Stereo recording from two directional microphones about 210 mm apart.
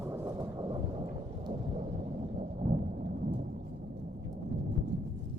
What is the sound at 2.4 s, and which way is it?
Thunder, 40° right (ahead or behind).